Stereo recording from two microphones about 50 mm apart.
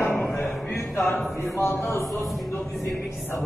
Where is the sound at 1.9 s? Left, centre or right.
Left.